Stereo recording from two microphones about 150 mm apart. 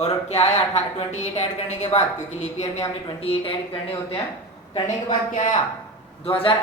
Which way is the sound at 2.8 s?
35° left (ahead or behind).